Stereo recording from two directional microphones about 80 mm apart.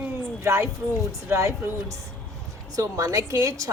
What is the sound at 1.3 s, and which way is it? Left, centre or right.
A woman's voice, right.